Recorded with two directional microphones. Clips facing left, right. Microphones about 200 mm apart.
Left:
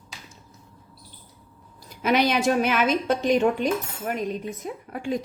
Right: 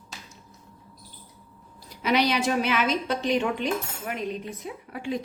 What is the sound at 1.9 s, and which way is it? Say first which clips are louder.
A woman's voice: left 2 dB; 50° left (ahead or behind).